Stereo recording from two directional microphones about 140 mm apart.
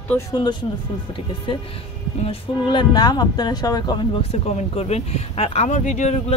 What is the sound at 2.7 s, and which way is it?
Speech, 30° left (ahead or behind).